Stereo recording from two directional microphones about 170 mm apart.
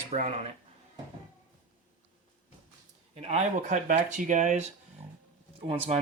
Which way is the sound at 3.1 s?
40° right (ahead or behind).